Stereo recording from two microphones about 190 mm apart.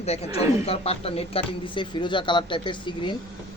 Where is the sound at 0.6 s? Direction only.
30° left (ahead or behind).